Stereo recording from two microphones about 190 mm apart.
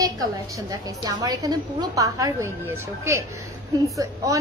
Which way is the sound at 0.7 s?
20° right (ahead or behind).